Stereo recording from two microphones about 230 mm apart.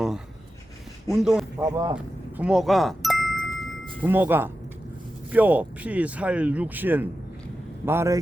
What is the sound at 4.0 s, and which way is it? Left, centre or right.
Speech, centre.